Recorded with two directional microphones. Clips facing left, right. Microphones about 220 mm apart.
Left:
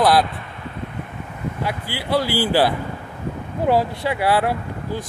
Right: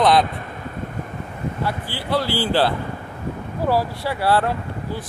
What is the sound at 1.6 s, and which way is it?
Speech, 15° left (ahead or behind).